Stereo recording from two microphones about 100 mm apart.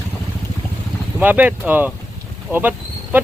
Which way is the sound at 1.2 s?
15° right (ahead or behind).